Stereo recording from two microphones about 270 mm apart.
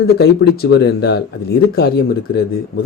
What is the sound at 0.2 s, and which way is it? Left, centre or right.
Speech, left.